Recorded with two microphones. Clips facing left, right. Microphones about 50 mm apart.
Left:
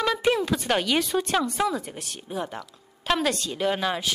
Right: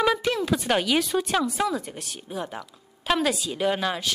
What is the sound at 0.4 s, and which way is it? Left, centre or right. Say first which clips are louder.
Speech: right 1 dB; centre.